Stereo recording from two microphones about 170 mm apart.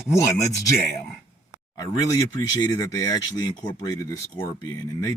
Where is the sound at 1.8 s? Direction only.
20° left (ahead or behind).